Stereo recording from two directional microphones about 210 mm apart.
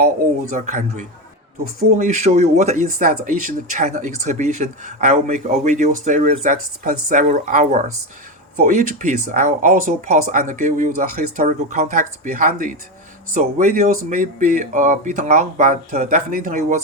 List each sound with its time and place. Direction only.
0.5 s speech: 35° right (ahead or behind)